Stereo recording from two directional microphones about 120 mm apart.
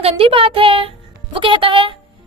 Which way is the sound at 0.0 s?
50° right (ahead or behind).